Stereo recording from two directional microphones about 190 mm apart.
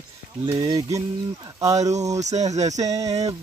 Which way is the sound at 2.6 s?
20° right (ahead or behind).